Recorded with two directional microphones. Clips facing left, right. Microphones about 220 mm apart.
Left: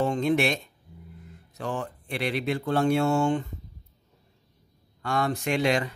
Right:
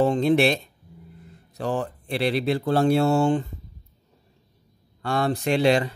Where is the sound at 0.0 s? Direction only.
35° right (ahead or behind).